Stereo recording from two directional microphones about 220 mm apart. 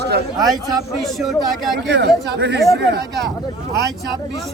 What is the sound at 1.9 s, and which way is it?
Speech, 50° right (ahead or behind).